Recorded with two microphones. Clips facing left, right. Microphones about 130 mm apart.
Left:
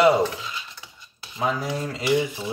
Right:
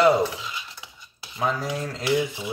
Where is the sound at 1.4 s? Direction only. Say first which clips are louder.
Left 1 dB; 10° left (ahead or behind).